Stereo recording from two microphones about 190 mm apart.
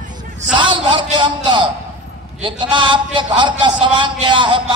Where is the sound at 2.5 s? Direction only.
25° right (ahead or behind).